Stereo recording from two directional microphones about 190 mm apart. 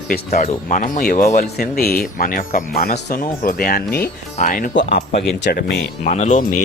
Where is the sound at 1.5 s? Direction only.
55° left (ahead or behind).